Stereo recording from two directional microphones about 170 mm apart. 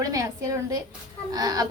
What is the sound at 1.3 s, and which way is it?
Speech, 20° right (ahead or behind).